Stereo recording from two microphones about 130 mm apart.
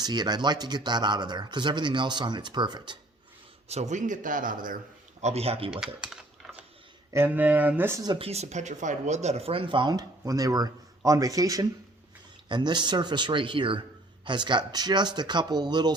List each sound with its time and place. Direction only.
0.0 s speech: 35° right (ahead or behind)
3.7 s speech: 60° right (ahead or behind); by 4.8 s 90° right
5.2 s speech: 50° right (ahead or behind)
5.8 s speech: 5° right (ahead or behind)
7.1 s speech: 15° right (ahead or behind)
8.0 s speech: 35° right (ahead or behind)
8.3 s speech: 60° right (ahead or behind); by 16.0 s 35° right (ahead or behind)